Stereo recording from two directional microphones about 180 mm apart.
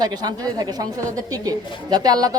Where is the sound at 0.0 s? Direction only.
20° right (ahead or behind).